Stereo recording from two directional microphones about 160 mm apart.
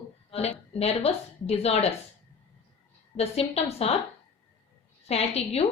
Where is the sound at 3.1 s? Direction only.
40° left (ahead or behind).